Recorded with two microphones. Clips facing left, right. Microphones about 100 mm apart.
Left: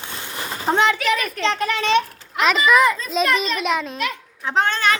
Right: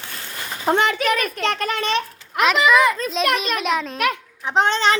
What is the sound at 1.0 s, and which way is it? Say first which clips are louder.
Speech: even; 50° right (ahead or behind).